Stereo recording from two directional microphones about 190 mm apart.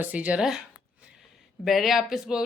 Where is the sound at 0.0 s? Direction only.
10° right (ahead or behind).